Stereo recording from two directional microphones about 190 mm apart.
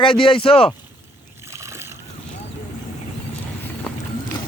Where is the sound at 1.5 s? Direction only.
15° right (ahead or behind).